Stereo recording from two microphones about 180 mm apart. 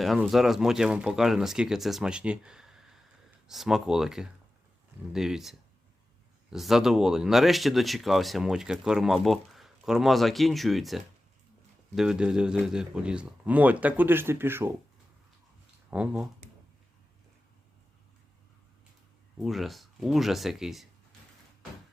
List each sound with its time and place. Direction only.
0.0 s speech: centre (ahead or behind)
15.9 s speech: 5° right (ahead or behind)
19.4 s speech: centre (ahead or behind)